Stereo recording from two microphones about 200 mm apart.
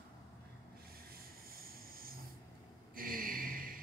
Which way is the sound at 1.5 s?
45° right (ahead or behind).